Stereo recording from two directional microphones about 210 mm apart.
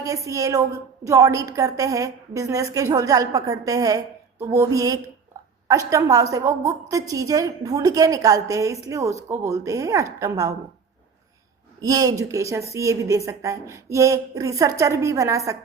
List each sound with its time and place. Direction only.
0.0 s a woman's voice: 15° right (ahead or behind)
11.8 s a woman's voice: 15° right (ahead or behind)